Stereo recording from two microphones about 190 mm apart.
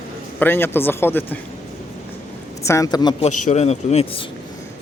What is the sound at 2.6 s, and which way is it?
Speech, 15° left (ahead or behind).